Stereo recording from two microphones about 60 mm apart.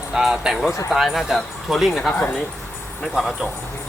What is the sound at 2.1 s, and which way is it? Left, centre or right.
Speech, left.